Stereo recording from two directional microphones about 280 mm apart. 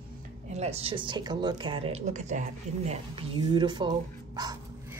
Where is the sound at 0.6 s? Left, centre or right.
Right.